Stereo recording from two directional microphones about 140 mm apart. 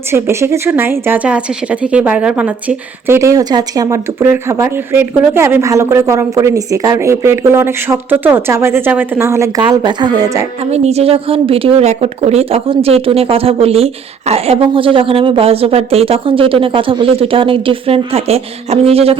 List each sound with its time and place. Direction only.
0.1 s speech: 20° right (ahead or behind)
9.6 s speech: 30° right (ahead or behind)
10.6 s a woman's voice: 50° right (ahead or behind)